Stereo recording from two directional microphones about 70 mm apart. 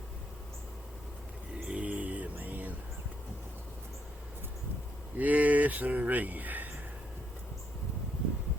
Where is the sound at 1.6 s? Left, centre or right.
Centre.